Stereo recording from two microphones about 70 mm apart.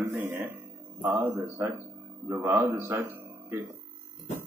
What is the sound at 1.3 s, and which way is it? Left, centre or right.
A man's voice, right.